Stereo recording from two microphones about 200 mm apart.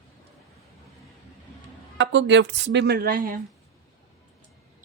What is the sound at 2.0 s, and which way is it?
Speech, 65° right (ahead or behind).